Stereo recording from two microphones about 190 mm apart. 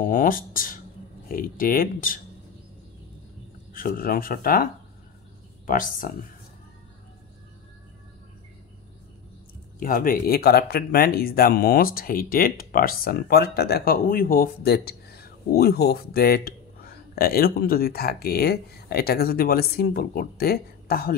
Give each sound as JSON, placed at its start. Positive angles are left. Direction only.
{"t": 0.0, "sound": "speech", "side_deg": 45}
{"t": 3.7, "sound": "speech", "side_deg": 50}
{"t": 5.7, "sound": "speech", "side_deg": 45}
{"t": 9.8, "sound": "speech", "side_deg": 50}